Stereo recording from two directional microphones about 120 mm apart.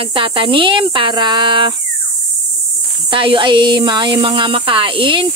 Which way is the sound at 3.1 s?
45° right (ahead or behind).